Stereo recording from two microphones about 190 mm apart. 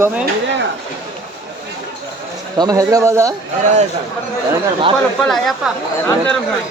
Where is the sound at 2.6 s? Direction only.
20° right (ahead or behind).